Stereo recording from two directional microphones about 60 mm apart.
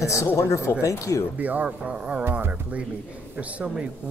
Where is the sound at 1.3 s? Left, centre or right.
Right.